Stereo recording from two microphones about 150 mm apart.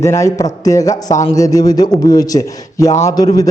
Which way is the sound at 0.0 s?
20° left (ahead or behind).